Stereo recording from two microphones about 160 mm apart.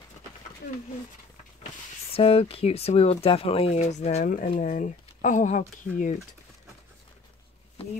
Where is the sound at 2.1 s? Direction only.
35° left (ahead or behind); by 5.6 s 50° left (ahead or behind).